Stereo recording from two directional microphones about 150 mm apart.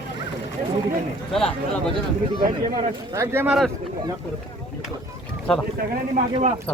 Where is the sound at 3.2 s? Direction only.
15° right (ahead or behind).